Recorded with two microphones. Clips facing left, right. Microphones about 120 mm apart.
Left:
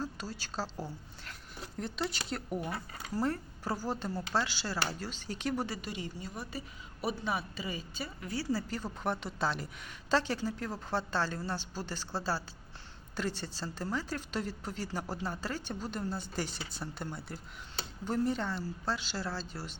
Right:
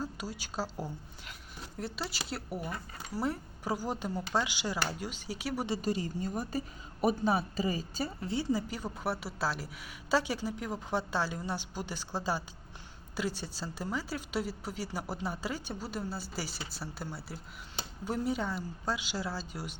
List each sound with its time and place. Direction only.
0.0 s speech: 10° right (ahead or behind)
5.8 s speech: 40° right (ahead or behind)
8.3 s speech: 20° right (ahead or behind)